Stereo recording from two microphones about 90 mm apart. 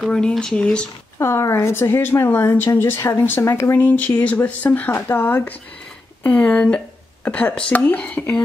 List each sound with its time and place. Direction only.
0.0 s speech: 5° left (ahead or behind)
1.1 s a woman's voice: 35° left (ahead or behind); by 8.4 s 15° left (ahead or behind)